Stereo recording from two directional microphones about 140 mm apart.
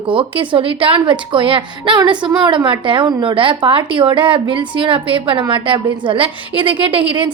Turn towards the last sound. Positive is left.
turn(degrees=-35)  # may be behind; listen again after turning